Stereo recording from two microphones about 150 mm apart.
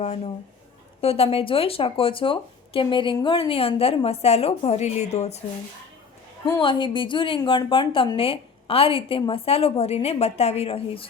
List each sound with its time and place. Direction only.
1.0 s a woman's voice: 40° left (ahead or behind)
6.4 s a woman's voice: 30° left (ahead or behind)